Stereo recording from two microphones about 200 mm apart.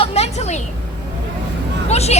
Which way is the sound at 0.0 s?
30° left (ahead or behind).